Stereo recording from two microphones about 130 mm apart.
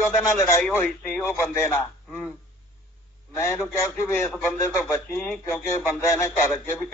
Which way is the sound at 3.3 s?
20° left (ahead or behind).